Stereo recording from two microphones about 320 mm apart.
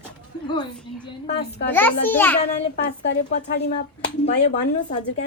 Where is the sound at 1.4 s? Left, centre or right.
Left.